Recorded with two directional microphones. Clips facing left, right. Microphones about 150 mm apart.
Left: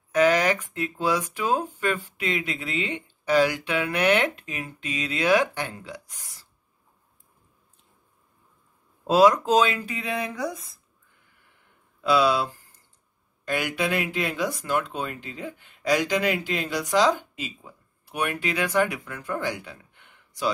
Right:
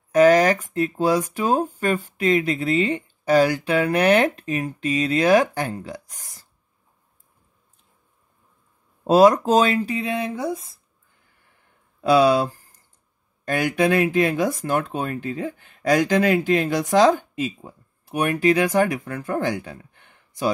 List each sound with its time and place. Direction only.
0.1 s speech: 40° right (ahead or behind)
9.0 s speech: 45° right (ahead or behind); by 10.7 s 30° right (ahead or behind)
12.0 s a sound: 45° right (ahead or behind)
13.5 s speech: 45° right (ahead or behind)